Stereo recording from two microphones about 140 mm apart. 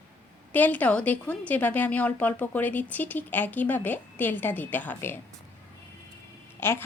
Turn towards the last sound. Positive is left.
turn(degrees=15)  # may be behind; listen again after turning